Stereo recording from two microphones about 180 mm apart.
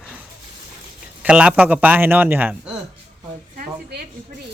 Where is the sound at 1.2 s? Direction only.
5° right (ahead or behind).